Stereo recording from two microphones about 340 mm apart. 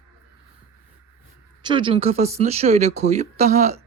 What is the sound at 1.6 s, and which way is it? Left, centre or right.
Speech, centre.